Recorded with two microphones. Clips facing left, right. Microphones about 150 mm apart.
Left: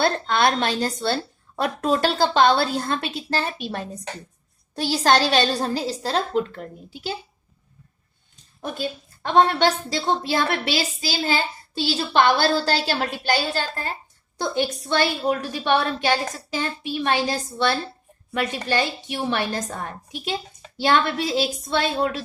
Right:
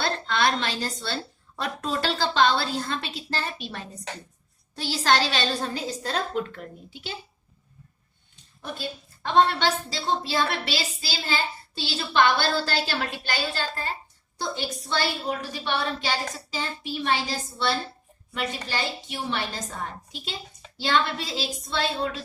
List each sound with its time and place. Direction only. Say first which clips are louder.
0.0 s a woman's voice: left 5 dB; 50° left (ahead or behind)
8.6 s a woman's voice: left 5 dB; 50° left (ahead or behind)
14.8 s a woman's voice: left 4 dB; 60° left (ahead or behind)